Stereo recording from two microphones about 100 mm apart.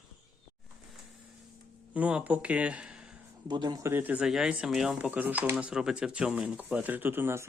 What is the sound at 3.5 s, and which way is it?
Speech, 45° right (ahead or behind).